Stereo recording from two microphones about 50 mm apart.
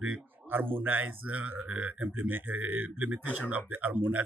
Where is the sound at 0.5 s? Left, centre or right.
Right.